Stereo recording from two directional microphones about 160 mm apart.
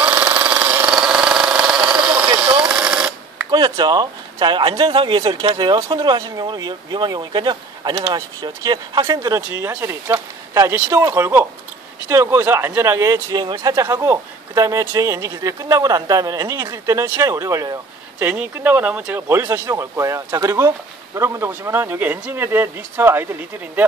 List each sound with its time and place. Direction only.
0.0 s engine: 10° right (ahead or behind)
3.4 s speech: 25° right (ahead or behind)